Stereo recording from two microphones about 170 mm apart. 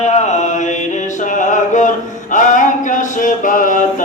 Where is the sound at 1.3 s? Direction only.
45° left (ahead or behind).